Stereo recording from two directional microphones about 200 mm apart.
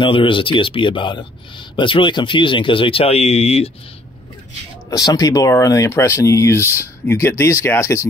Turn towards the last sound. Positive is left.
turn(degrees=15)  # may be behind; listen again after turning